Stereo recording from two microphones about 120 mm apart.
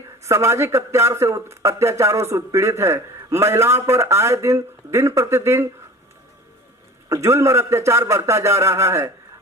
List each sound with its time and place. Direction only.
0.2 s speech: 25° right (ahead or behind)
7.1 s speech: 25° right (ahead or behind)